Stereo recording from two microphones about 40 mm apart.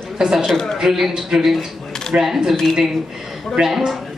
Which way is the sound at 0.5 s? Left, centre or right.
Centre.